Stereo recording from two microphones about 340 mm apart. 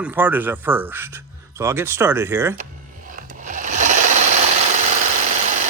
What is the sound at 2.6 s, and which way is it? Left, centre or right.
Sewing machine, right.